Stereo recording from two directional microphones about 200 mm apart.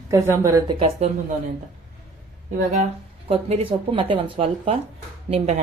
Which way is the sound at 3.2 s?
30° right (ahead or behind).